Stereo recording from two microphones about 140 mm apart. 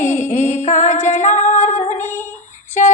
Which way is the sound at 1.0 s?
60° left (ahead or behind).